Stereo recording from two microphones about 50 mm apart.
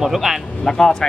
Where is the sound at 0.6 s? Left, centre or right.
Centre.